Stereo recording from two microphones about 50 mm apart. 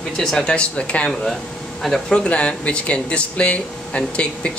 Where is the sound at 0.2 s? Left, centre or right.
Centre.